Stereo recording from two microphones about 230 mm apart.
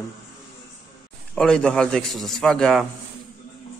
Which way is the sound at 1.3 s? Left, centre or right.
Centre.